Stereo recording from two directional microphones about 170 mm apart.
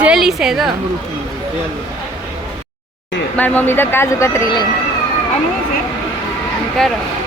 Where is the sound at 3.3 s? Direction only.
10° left (ahead or behind).